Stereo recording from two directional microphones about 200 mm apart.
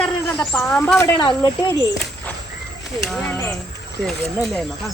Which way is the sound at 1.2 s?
20° left (ahead or behind).